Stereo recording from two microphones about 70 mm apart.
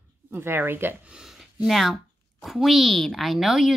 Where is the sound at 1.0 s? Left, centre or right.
Centre.